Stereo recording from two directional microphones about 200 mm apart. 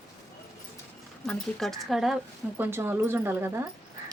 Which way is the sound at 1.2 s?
Centre (ahead or behind).